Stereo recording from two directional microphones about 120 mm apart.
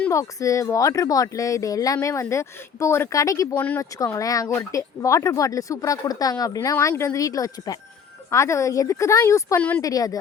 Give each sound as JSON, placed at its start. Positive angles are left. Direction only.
{"t": 0.1, "sound": "speech", "side_deg": 25}
{"t": 9.6, "sound": "speech", "side_deg": 15}
{"t": 9.8, "sound": "a woman's voice", "side_deg": 30}